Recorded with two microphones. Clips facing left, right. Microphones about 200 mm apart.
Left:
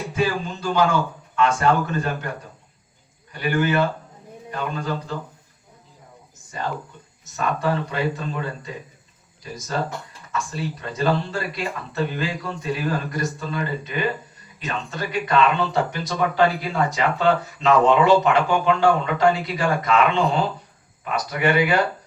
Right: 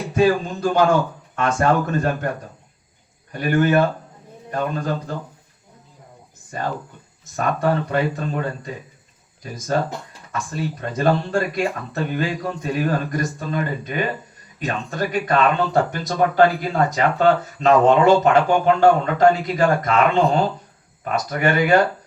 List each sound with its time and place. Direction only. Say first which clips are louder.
0.1 s speech: right 7 dB; 50° right (ahead or behind)
3.3 s speech: right 4 dB; 45° right (ahead or behind)
6.5 s speech: right 2 dB; 50° right (ahead or behind)
10.3 s speech: right 2 dB; 50° right (ahead or behind)